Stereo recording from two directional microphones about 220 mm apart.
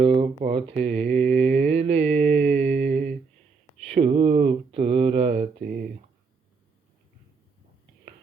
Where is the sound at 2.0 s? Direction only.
5° left (ahead or behind).